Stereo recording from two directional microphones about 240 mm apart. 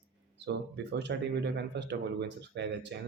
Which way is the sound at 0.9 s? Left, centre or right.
Right.